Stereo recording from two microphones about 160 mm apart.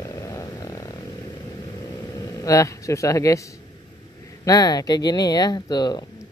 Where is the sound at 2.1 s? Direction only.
20° left (ahead or behind).